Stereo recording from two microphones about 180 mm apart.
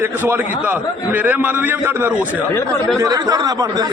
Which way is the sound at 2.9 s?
20° right (ahead or behind).